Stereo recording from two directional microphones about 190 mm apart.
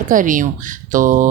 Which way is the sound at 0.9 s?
45° right (ahead or behind).